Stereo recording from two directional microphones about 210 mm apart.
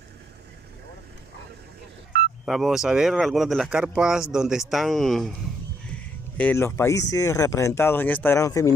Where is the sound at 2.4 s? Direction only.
Centre (ahead or behind).